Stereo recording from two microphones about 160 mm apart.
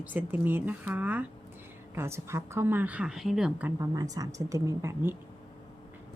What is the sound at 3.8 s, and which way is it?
A woman's voice, 20° right (ahead or behind).